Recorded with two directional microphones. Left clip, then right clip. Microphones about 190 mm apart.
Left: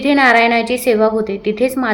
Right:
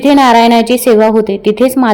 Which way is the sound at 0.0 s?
30° right (ahead or behind).